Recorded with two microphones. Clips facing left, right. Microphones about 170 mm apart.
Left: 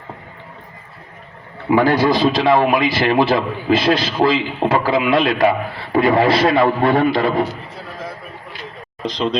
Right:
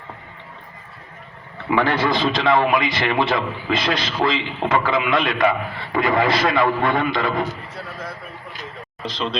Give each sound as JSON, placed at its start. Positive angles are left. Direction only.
{"t": 1.7, "sound": "a man's voice", "side_deg": 35}